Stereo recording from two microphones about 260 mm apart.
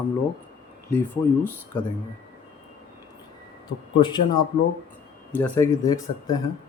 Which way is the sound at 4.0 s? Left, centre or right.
Centre.